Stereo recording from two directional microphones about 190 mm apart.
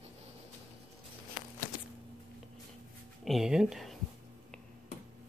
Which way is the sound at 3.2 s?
Centre (ahead or behind).